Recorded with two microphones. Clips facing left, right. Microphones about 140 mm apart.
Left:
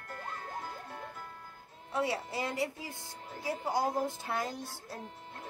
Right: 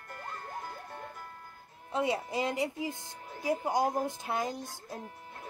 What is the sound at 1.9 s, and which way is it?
A woman's voice, 20° right (ahead or behind).